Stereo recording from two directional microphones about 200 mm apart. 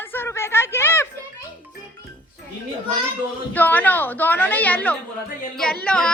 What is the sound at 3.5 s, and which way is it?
A woman's voice, 10° left (ahead or behind).